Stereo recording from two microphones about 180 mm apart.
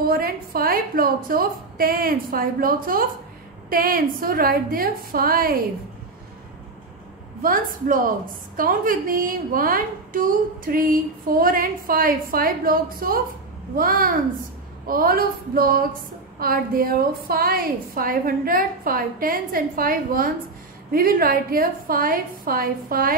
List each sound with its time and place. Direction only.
0.0 s a woman's voice: 55° right (ahead or behind)
7.4 s a woman's voice: 50° right (ahead or behind)